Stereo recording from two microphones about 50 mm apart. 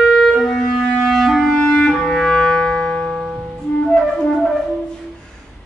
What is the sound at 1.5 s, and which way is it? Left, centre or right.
Clarinet, centre.